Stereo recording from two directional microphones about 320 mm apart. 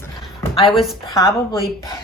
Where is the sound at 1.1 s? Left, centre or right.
Centre.